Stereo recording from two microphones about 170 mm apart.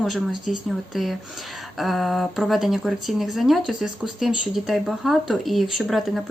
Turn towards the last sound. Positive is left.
turn(degrees=0)  # may be behind; listen again after turning